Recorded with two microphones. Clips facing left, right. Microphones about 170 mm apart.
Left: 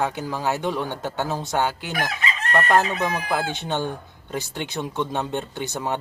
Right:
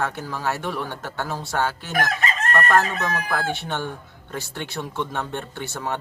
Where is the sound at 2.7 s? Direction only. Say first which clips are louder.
Left 2 dB; 15° left (ahead or behind).